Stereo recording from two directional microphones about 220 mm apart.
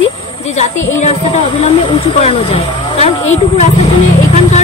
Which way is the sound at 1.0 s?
30° left (ahead or behind).